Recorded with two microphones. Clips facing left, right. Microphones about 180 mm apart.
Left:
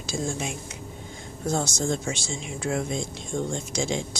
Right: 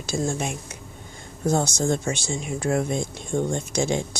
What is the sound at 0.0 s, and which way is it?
Speech, 55° right (ahead or behind).